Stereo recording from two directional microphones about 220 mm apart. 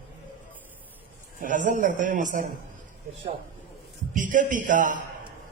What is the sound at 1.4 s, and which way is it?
A man's voice, 35° right (ahead or behind).